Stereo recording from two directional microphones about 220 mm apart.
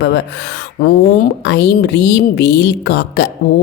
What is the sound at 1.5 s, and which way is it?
A woman's voice, 50° left (ahead or behind).